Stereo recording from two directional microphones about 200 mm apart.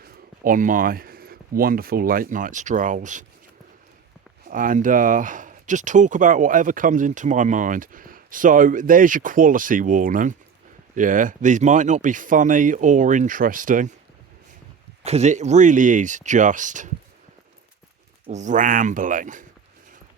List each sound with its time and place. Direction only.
0.0 s speech: 45° right (ahead or behind)
4.4 s speech: 45° right (ahead or behind)
15.0 s speech: 35° right (ahead or behind)
18.3 s speech: 35° right (ahead or behind)